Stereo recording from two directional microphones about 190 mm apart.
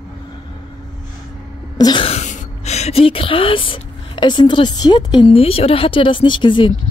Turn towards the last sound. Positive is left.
turn(degrees=25)  # may be behind; listen again after turning